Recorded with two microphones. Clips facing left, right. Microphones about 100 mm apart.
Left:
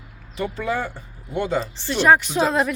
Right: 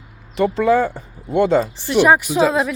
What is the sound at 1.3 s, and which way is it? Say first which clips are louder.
Speech: right 9 dB; 70° right (ahead or behind).